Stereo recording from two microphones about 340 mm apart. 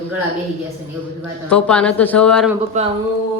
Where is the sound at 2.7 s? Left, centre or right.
Right.